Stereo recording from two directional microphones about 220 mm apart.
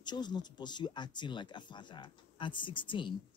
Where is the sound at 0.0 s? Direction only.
20° left (ahead or behind).